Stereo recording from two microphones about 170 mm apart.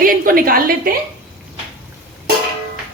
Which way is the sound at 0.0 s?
55° right (ahead or behind).